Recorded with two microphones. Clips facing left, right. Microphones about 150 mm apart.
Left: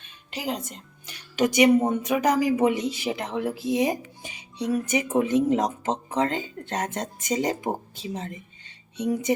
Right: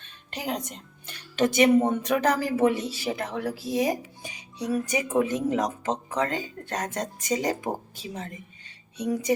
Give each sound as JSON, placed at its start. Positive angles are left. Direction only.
{"t": 0.3, "sound": "speech", "side_deg": 5}